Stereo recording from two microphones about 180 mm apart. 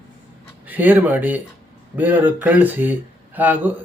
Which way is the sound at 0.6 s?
10° right (ahead or behind).